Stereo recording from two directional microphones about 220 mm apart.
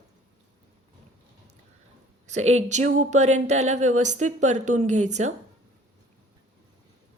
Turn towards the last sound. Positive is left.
turn(degrees=-30)  # may be behind; listen again after turning